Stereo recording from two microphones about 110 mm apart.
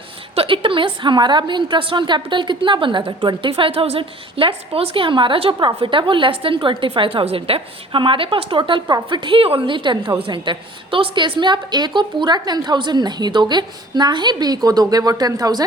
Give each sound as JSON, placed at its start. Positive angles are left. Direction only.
{"t": 0.3, "sound": "a woman's voice", "side_deg": -55}